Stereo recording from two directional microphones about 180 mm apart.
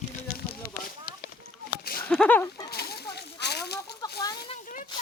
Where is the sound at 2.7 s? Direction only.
60° left (ahead or behind).